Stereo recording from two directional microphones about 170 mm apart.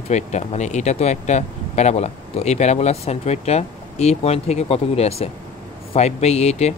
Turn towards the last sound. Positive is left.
turn(degrees=40)  # may be behind; listen again after turning